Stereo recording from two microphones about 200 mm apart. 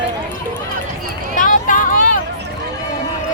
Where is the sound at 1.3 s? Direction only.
40° left (ahead or behind).